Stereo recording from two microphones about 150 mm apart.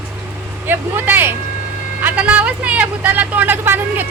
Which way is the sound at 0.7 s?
15° right (ahead or behind).